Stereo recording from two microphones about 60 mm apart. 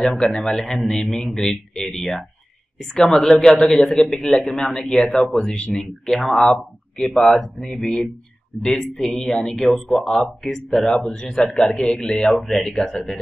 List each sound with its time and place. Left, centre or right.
0.0 s speech: centre
6.0 s speech: centre